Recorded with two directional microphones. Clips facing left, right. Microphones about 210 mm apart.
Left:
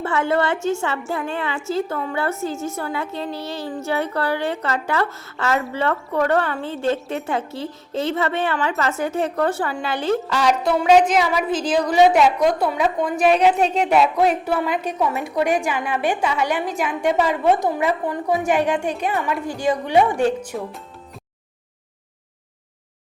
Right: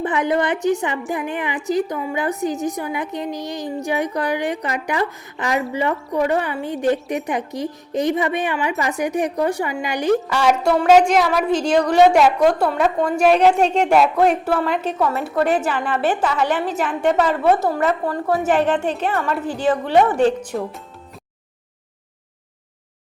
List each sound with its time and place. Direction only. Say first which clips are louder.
0.0 s a woman's voice: right 1 dB; 15° right (ahead or behind)
10.8 s a woman's voice: right 1 dB; centre (ahead or behind)
14.8 s a woman's voice: right 2 dB; 15° left (ahead or behind)